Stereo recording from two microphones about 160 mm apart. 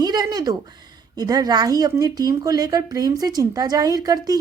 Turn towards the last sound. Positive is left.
turn(degrees=-25)  # may be behind; listen again after turning